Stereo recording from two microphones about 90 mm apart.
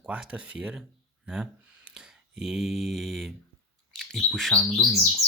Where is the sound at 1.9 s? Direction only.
10° right (ahead or behind).